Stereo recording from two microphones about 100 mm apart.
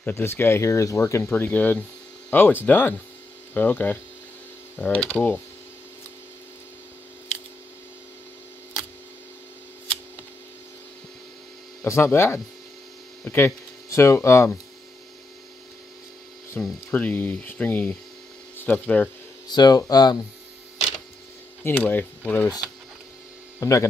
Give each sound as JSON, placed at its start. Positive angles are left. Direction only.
{"t": 0.0, "sound": "speech", "side_deg": 25}
{"t": 1.3, "sound": "speech", "side_deg": 15}
{"t": 11.8, "sound": "speech", "side_deg": 25}
{"t": 16.6, "sound": "speech", "side_deg": 15}
{"t": 19.5, "sound": "speech", "side_deg": 40}
{"t": 21.6, "sound": "speech", "side_deg": 20}
{"t": 23.6, "sound": "speech", "side_deg": 30}